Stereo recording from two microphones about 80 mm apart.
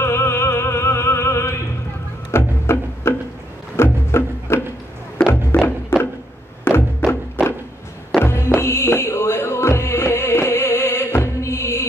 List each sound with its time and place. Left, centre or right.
0.0 s opera: left
2.3 s music: left
6.7 s music: left
7.0 s music: centre
7.4 s a sound: centre
8.2 s music: left